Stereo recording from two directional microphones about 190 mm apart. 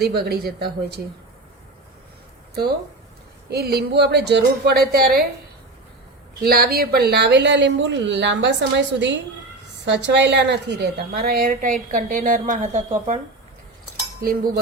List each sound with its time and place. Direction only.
0.0 s a woman's voice: 55° right (ahead or behind)
3.5 s a woman's voice: 55° right (ahead or behind)
6.4 s a woman's voice: 55° right (ahead or behind)
14.2 s a woman's voice: 50° right (ahead or behind)